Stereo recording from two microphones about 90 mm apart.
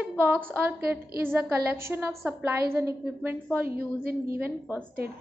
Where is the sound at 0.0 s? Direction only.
20° right (ahead or behind).